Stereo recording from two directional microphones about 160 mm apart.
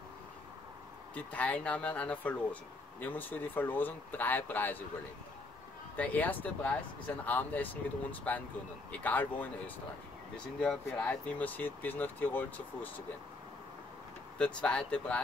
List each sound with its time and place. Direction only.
1.1 s speech: 10° left (ahead or behind)
5.9 s speech: 10° left (ahead or behind)
14.4 s speech: 5° left (ahead or behind)